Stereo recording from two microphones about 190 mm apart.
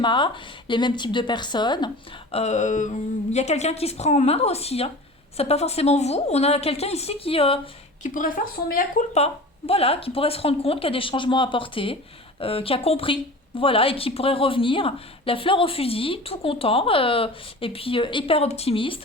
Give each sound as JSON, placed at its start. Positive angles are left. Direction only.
{"t": 0.0, "sound": "a woman's voice", "side_deg": 25}
{"t": 2.3, "sound": "a woman's voice", "side_deg": 35}
{"t": 8.0, "sound": "a woman's voice", "side_deg": 45}